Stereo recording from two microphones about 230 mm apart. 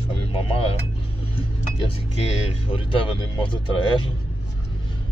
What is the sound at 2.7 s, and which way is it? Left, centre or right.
Speech, left.